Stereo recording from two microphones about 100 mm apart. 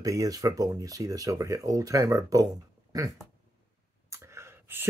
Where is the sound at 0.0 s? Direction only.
35° right (ahead or behind).